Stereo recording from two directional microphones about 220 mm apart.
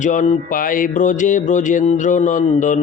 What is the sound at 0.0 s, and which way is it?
Mantra, 35° left (ahead or behind).